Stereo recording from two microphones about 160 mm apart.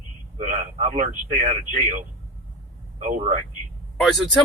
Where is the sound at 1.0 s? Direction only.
50° right (ahead or behind).